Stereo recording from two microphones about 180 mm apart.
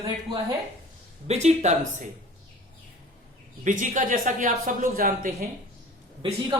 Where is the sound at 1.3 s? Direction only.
40° right (ahead or behind).